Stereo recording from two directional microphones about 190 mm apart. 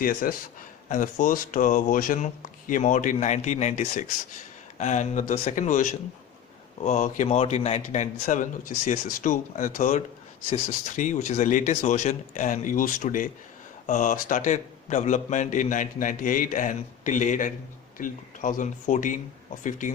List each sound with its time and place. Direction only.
0.0 s a man's voice: 50° left (ahead or behind)